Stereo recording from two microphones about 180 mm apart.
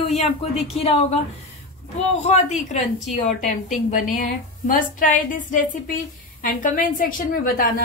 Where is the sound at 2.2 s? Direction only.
40° left (ahead or behind).